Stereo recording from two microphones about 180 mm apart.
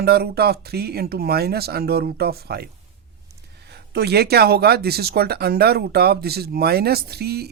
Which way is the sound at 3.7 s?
65° right (ahead or behind).